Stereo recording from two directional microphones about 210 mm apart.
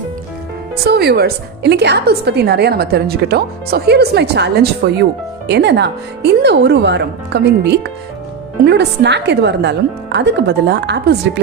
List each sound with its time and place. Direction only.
0.9 s a woman's voice: 50° right (ahead or behind)